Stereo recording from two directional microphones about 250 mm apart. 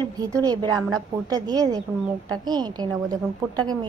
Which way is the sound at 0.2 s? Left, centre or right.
Centre.